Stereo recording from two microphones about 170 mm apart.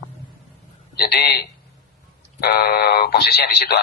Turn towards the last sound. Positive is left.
turn(degrees=70)  # may be behind; listen again after turning